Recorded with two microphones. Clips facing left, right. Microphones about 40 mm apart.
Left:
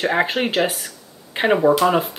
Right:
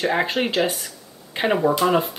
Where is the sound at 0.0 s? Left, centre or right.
Centre.